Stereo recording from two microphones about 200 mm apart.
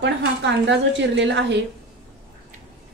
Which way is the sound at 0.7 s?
60° right (ahead or behind).